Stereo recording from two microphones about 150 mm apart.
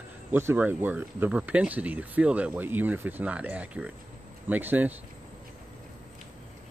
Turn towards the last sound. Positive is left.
turn(degrees=-10)  # may be behind; listen again after turning